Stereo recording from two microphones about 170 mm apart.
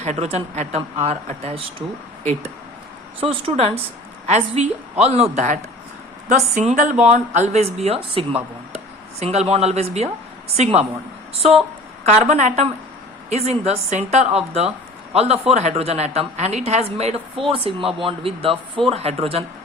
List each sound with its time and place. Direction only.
0.0 s a woman's voice: 40° right (ahead or behind)
3.2 s a woman's voice: 30° right (ahead or behind)
12.0 s a woman's voice: 45° right (ahead or behind)